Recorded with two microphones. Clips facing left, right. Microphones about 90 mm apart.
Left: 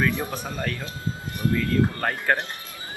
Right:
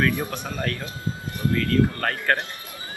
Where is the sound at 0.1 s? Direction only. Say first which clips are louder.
Right 1 dB; 15° left (ahead or behind).